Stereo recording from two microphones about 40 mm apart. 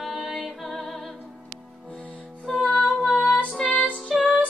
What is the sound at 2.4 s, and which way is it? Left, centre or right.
Music, centre.